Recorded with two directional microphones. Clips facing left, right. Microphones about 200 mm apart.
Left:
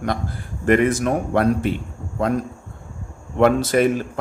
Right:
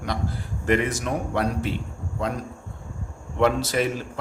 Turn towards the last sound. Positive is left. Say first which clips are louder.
# left 6 dB
turn(degrees=50)  # may be behind; listen again after turning